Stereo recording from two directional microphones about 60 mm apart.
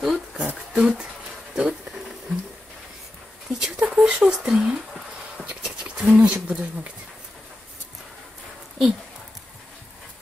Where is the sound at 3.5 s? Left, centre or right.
Centre.